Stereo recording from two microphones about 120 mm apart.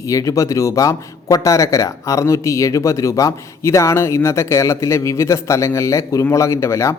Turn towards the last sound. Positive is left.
turn(degrees=25)  # may be behind; listen again after turning